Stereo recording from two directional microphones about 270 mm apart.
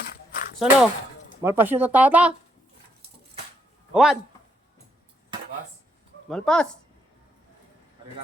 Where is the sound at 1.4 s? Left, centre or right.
Centre.